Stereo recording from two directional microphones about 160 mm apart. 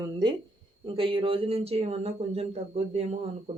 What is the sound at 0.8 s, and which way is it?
Speech, 35° right (ahead or behind).